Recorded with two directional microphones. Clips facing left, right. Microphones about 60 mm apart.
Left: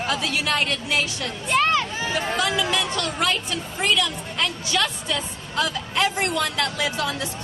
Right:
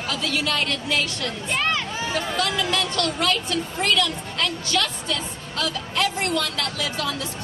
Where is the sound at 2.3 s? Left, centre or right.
Centre.